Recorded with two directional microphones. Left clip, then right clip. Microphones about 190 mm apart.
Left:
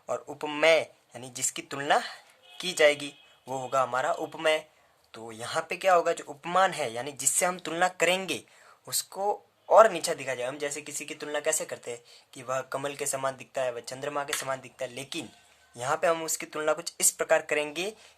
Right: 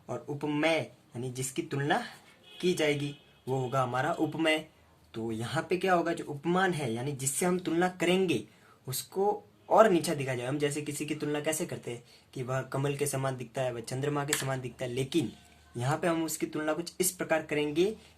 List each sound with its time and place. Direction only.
0.1 s speech: 50° left (ahead or behind)